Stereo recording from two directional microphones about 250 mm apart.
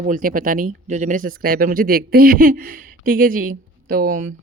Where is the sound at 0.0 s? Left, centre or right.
Right.